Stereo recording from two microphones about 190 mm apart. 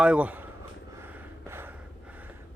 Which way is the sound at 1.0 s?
10° right (ahead or behind).